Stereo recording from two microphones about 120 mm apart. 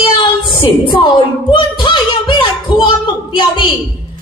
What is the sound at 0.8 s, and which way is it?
Speech, 40° left (ahead or behind).